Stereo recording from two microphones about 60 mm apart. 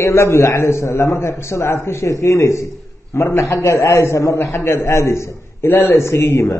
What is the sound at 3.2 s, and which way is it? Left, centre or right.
Speech, left.